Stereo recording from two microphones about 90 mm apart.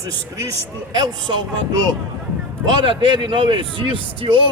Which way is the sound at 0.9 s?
55° right (ahead or behind).